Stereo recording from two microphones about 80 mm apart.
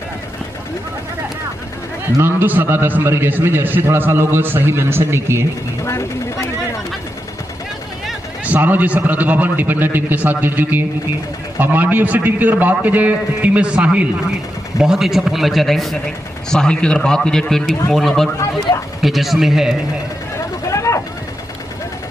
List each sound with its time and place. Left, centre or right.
2.4 s a man's voice: right
5.9 s speech: left
8.5 s a man's voice: right; by 19.7 s centre
20.6 s a sound: left